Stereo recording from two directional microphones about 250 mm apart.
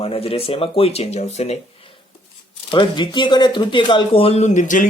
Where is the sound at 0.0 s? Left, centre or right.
Left.